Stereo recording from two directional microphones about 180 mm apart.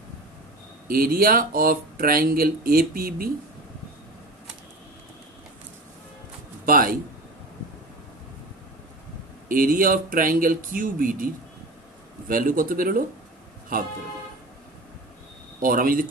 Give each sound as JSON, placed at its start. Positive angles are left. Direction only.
{"t": 0.8, "sound": "speech", "side_deg": -55}
{"t": 6.6, "sound": "a man's voice", "side_deg": -50}
{"t": 9.5, "sound": "speech", "side_deg": -50}
{"t": 12.3, "sound": "speech", "side_deg": -50}
{"t": 15.6, "sound": "speech", "side_deg": -50}